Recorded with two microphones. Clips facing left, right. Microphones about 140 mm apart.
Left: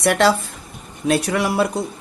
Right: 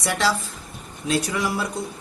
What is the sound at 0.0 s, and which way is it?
Speech, 60° left (ahead or behind).